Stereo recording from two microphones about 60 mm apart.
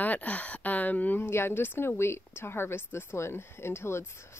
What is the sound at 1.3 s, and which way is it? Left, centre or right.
A woman's voice, left.